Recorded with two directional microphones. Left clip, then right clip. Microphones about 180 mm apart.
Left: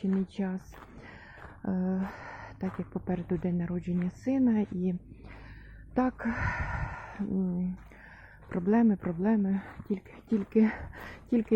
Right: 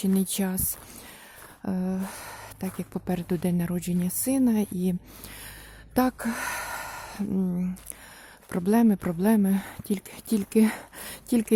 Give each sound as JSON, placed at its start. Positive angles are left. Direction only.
{"t": 0.0, "sound": "speech", "side_deg": -40}
{"t": 1.6, "sound": "speech", "side_deg": -25}
{"t": 3.1, "sound": "speech", "side_deg": -35}